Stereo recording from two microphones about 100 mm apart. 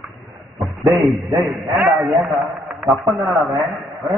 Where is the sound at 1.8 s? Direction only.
Centre (ahead or behind).